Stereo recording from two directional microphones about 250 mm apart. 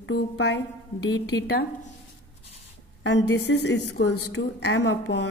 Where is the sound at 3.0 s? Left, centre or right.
Left.